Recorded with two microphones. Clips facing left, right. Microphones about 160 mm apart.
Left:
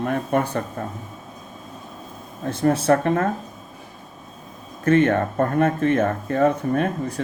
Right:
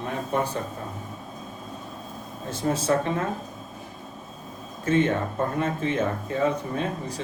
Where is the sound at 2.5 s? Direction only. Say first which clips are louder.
Left 5 dB; 60° left (ahead or behind).